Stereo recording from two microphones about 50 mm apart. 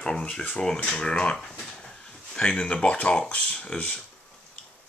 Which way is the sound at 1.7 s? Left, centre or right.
Centre.